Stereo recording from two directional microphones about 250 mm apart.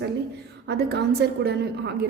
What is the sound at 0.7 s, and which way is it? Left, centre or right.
A woman's voice, right.